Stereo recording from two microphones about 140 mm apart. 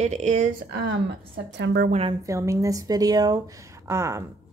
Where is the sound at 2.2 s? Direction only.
20° right (ahead or behind).